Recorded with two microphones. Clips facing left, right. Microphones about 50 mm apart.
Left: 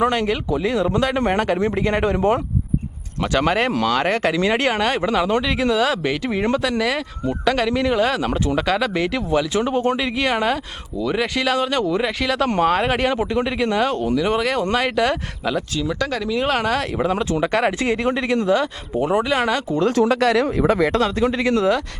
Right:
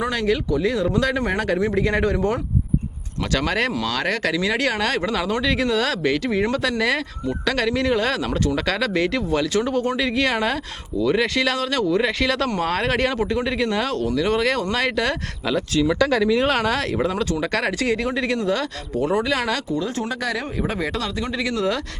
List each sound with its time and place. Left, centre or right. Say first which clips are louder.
0.0 s speech: left 2 dB; left
4.8 s speech: left 3 dB; centre
6.6 s speech: left 1 dB; centre
8.2 s speech: left 2 dB; left
8.6 s speech: left 1 dB; centre
9.6 s speech: left 2 dB; left
10.0 s speech: even; centre
17.1 s speech: left 3 dB; left
19.8 s speech: left 9 dB; left